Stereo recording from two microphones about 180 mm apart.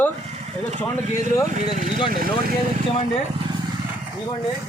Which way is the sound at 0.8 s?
15° left (ahead or behind).